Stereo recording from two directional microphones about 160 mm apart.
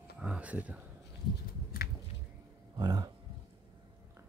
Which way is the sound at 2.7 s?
25° right (ahead or behind).